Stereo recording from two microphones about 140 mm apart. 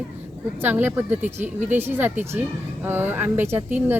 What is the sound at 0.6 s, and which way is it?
Speech, 15° right (ahead or behind).